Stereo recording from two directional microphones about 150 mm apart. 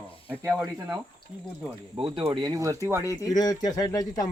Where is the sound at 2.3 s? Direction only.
25° right (ahead or behind).